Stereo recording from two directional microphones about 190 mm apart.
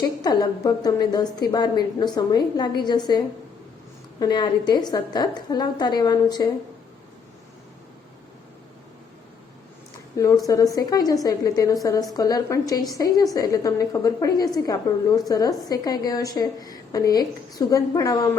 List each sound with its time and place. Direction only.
0.2 s a woman's voice: 20° left (ahead or behind)
10.2 s a woman's voice: 20° left (ahead or behind)